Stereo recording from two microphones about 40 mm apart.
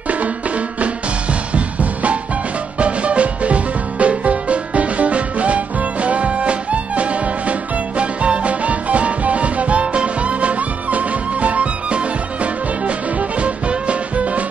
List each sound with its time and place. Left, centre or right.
1.5 s music: right
13.4 s music: right